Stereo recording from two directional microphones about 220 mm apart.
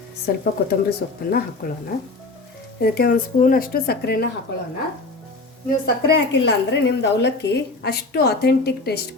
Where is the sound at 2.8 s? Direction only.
45° left (ahead or behind).